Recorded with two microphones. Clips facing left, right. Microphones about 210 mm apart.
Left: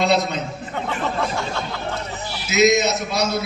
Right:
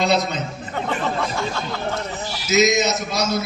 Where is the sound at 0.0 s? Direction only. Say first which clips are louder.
Left 1 dB; centre (ahead or behind).